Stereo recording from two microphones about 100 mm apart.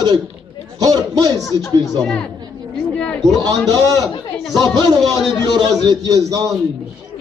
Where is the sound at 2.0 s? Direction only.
5° left (ahead or behind).